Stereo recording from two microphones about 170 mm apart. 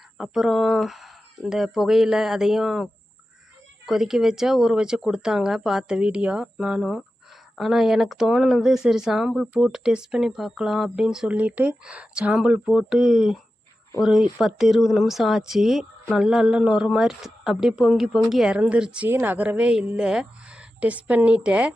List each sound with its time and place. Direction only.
0.2 s speech: centre (ahead or behind)